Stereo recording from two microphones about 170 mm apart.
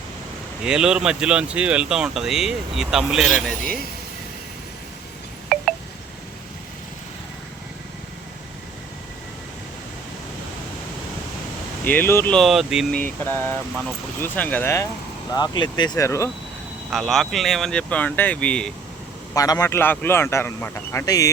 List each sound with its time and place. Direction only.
0.6 s speech: 5° right (ahead or behind)
11.9 s speech: 10° left (ahead or behind)
13.0 s speech: 10° left (ahead or behind)
15.3 s speech: 25° left (ahead or behind)
16.9 s speech: centre (ahead or behind)
19.3 s speech: 20° left (ahead or behind)